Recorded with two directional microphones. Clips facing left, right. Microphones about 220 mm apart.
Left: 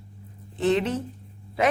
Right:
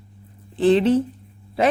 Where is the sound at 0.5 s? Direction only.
30° right (ahead or behind).